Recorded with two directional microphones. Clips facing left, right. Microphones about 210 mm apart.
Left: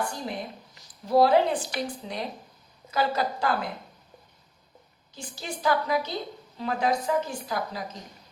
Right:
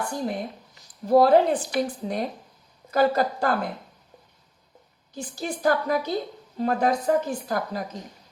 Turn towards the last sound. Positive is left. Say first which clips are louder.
# right 4 dB
turn(degrees=-50)  # may be behind; listen again after turning